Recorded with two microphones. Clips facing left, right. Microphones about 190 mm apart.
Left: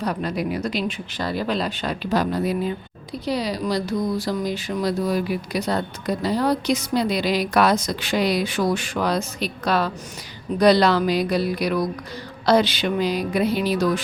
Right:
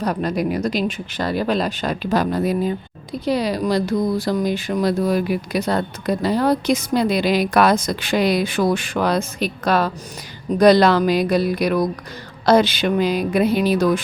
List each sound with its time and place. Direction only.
0.0 s speech: 45° right (ahead or behind)